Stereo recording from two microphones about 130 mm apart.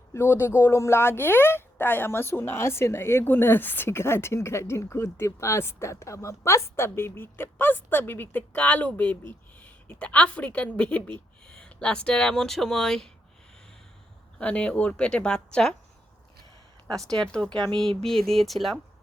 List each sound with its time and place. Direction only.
0.1 s a woman's voice: 20° left (ahead or behind); by 13.1 s 5° left (ahead or behind)
14.3 s speech: 10° left (ahead or behind)
16.9 s speech: 5° left (ahead or behind)
17.5 s speech: 35° right (ahead or behind)
17.7 s speech: 5° left (ahead or behind)